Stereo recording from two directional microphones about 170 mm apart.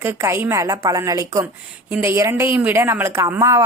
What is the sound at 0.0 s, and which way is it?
A woman's voice, 15° right (ahead or behind).